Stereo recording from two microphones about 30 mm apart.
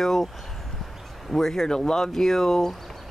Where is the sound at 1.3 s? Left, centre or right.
Centre.